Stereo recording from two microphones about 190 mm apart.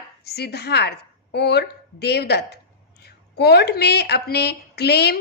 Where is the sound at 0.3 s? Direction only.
60° left (ahead or behind).